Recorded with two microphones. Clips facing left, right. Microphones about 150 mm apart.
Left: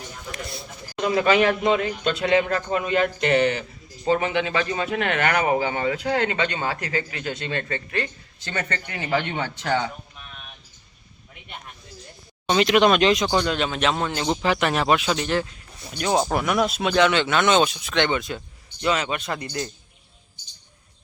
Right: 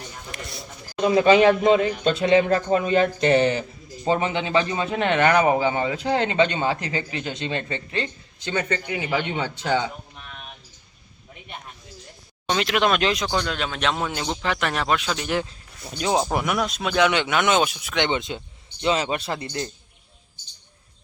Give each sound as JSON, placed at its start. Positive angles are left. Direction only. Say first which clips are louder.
{"t": 1.0, "sound": "speech", "louder": "right 4 dB", "side_deg": -25}
{"t": 12.5, "sound": "speech", "louder": "left 4 dB", "side_deg": 0}
{"t": 16.0, "sound": "speech", "louder": "left 1 dB", "side_deg": -10}
{"t": 16.6, "sound": "speech", "louder": "left 3 dB", "side_deg": 5}
{"t": 17.1, "sound": "speech", "louder": "left 1 dB", "side_deg": -15}